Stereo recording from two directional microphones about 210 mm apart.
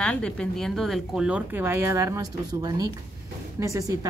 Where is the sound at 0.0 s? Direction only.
5° left (ahead or behind).